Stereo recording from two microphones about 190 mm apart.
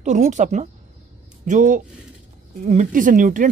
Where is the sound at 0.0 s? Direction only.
40° right (ahead or behind).